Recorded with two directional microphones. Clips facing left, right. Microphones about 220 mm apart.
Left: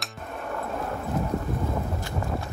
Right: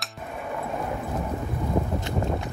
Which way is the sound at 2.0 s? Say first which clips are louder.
Right 3 dB; 20° right (ahead or behind).